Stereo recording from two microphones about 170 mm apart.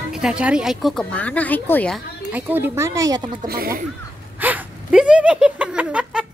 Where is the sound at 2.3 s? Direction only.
10° right (ahead or behind).